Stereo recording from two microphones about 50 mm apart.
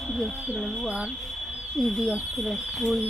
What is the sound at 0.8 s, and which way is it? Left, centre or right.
Speech, right.